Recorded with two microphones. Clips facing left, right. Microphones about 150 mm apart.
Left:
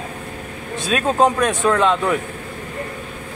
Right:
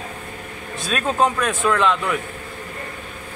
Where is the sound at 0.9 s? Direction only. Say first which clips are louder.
Left 3 dB; 35° left (ahead or behind).